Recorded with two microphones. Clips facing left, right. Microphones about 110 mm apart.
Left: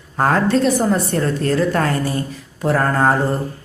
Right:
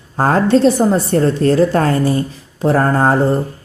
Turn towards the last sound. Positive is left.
turn(degrees=-30)  # may be behind; listen again after turning